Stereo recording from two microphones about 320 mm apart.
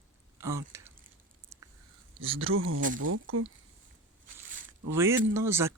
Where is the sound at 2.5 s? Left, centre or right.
Right.